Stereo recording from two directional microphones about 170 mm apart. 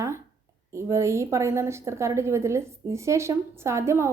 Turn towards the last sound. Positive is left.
turn(degrees=-15)  # may be behind; listen again after turning